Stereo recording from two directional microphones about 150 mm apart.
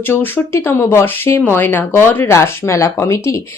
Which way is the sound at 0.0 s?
15° left (ahead or behind).